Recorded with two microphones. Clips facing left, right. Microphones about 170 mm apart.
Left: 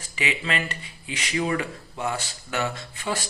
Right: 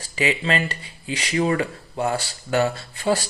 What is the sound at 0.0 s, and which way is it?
Speech, 35° right (ahead or behind).